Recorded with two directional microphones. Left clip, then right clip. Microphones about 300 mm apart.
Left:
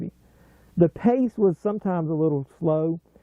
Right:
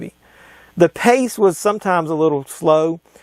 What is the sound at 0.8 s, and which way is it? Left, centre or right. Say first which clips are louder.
Speech: right 8 dB; centre.